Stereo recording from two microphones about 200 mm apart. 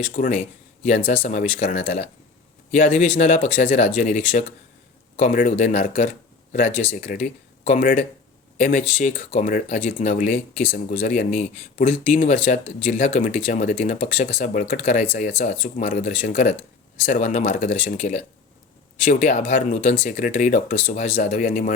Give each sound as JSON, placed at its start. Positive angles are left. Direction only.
{"t": 0.0, "sound": "speech", "side_deg": 35}
{"t": 15.9, "sound": "speech", "side_deg": 45}